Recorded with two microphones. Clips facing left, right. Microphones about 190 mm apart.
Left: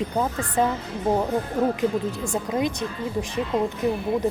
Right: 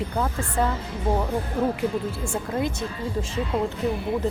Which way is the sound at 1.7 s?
20° left (ahead or behind).